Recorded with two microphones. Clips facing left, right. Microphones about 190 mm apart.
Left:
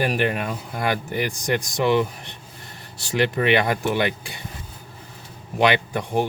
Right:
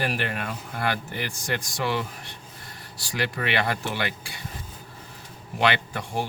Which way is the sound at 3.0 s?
25° left (ahead or behind).